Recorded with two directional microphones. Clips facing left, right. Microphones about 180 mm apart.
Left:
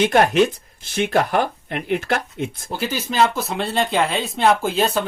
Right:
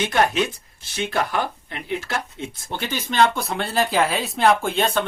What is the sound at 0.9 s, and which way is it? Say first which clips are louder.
Speech: left 5 dB; 55° left (ahead or behind).